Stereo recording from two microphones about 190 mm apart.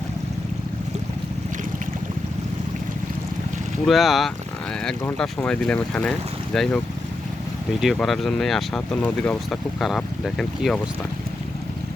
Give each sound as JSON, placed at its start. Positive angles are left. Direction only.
{"t": 3.8, "sound": "speech", "side_deg": 0}